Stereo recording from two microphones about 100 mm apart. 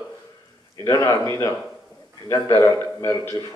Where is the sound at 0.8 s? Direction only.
30° left (ahead or behind).